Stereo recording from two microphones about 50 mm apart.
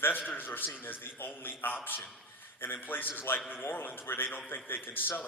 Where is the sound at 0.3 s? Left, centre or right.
Left.